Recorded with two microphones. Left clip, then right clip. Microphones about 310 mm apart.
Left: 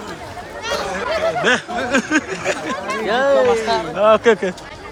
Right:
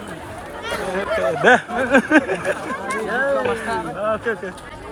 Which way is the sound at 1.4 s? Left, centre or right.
Centre.